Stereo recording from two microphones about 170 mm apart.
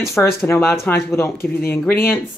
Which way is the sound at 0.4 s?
15° left (ahead or behind).